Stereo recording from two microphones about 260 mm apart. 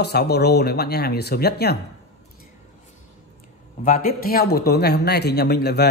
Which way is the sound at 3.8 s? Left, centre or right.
Left.